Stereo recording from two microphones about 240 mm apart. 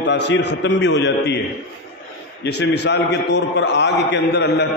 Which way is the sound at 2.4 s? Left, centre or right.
Left.